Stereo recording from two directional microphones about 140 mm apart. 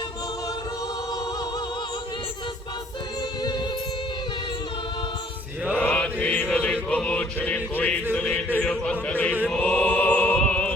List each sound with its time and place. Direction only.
3.4 s music: 30° left (ahead or behind)
5.7 s mantra: 10° left (ahead or behind)
6.9 s music: 10° left (ahead or behind)